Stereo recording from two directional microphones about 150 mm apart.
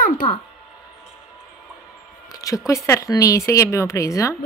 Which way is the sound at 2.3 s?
25° left (ahead or behind).